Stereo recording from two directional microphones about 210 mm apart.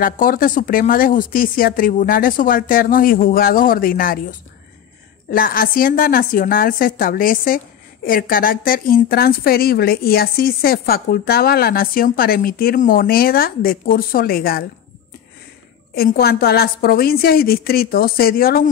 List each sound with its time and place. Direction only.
0.0 s a woman's voice: 40° left (ahead or behind)
5.3 s a woman's voice: 45° left (ahead or behind)
15.9 s a woman's voice: 45° left (ahead or behind)